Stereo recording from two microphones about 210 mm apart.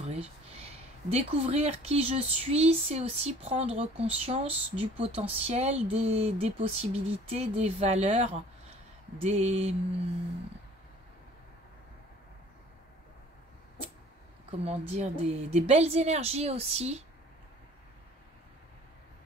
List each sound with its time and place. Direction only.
0.0 s speech: 30° right (ahead or behind)
14.6 s speech: 30° right (ahead or behind)